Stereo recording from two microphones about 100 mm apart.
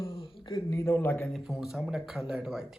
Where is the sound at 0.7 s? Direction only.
30° left (ahead or behind).